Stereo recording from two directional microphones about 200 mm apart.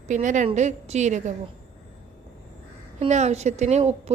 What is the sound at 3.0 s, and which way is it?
A woman's voice, 35° right (ahead or behind).